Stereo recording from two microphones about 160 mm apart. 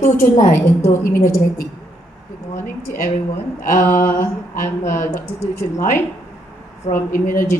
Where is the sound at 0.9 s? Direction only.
15° left (ahead or behind).